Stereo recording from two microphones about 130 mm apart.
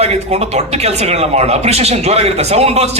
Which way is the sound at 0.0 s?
55° right (ahead or behind).